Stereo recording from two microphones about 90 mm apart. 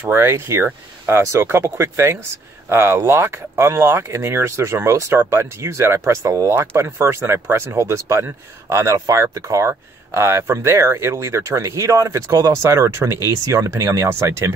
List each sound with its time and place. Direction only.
0.1 s speech: 25° right (ahead or behind)